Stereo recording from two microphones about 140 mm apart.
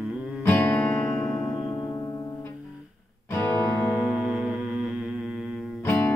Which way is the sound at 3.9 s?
Centre (ahead or behind).